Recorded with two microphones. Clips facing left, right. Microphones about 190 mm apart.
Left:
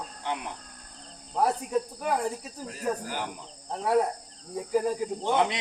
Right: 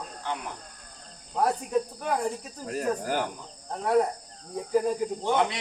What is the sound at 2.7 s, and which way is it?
Speech, 50° right (ahead or behind).